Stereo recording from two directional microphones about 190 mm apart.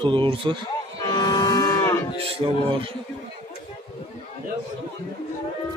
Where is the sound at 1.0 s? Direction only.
20° left (ahead or behind).